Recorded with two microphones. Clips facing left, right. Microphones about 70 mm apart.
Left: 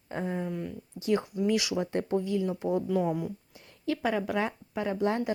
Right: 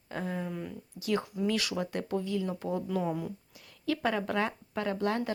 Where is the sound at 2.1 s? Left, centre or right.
Left.